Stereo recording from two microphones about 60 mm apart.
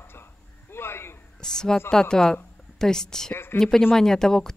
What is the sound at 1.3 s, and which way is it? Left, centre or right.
A woman's voice, centre.